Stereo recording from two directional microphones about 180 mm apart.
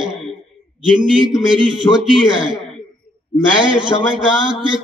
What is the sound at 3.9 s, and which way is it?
Speech, 20° left (ahead or behind).